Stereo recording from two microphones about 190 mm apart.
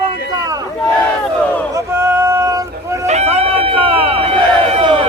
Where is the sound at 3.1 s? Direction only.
35° right (ahead or behind).